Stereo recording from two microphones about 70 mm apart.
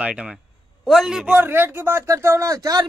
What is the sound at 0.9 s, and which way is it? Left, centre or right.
Speech, centre.